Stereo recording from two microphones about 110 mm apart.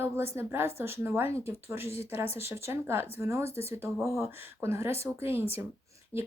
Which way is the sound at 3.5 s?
65° left (ahead or behind).